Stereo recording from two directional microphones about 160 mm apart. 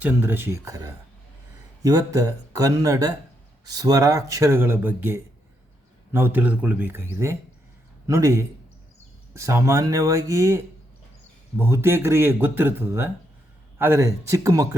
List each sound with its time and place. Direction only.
0.0 s a man's voice: 10° right (ahead or behind)